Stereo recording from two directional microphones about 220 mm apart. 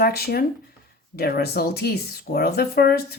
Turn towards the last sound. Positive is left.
turn(degrees=45)  # may be behind; listen again after turning